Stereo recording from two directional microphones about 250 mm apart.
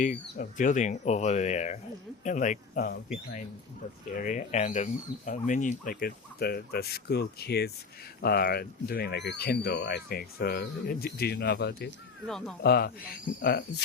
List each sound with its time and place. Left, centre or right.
0.0 s speech: left
4.1 s speech: left